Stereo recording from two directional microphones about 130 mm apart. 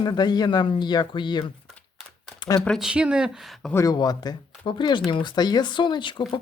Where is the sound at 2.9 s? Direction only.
10° right (ahead or behind).